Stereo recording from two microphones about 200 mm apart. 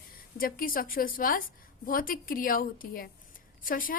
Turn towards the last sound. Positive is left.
turn(degrees=45)  # may be behind; listen again after turning